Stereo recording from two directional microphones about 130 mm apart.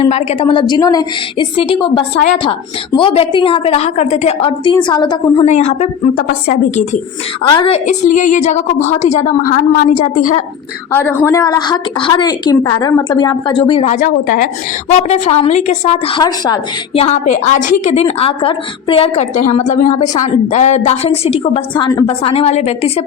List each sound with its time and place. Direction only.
0.0 s a woman's voice: 50° left (ahead or behind)
0.8 s a woman's voice: 30° left (ahead or behind)
1.5 s a woman's voice: 45° left (ahead or behind)
5.5 s a woman's voice: 60° left (ahead or behind)
7.4 s a woman's voice: 35° left (ahead or behind)
7.9 s a woman's voice: 70° left (ahead or behind)
10.9 s a woman's voice: 15° left (ahead or behind)
11.3 s a woman's voice: 30° left (ahead or behind)
13.8 s a woman's voice: 85° left
14.9 s a woman's voice: 55° left (ahead or behind)
16.2 s a woman's voice: 35° left (ahead or behind)
16.9 s a woman's voice: 55° left (ahead or behind); by 17.9 s 75° left (ahead or behind)
17.9 s a woman's voice: 45° left (ahead or behind)